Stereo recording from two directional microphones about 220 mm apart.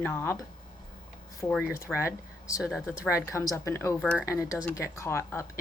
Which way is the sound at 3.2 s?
15° left (ahead or behind).